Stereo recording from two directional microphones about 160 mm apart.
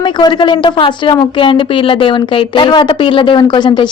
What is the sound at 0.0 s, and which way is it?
Speech, 30° left (ahead or behind).